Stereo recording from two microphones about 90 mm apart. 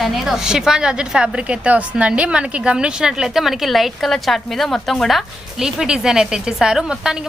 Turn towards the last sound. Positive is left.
turn(degrees=-5)  # may be behind; listen again after turning